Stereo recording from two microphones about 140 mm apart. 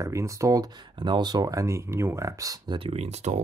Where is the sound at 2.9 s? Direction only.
50° right (ahead or behind).